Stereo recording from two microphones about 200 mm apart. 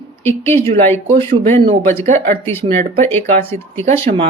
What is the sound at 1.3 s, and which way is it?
Speech, 25° right (ahead or behind).